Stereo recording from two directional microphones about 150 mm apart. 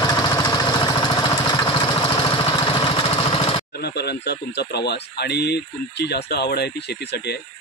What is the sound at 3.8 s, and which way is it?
Speech, 90° left.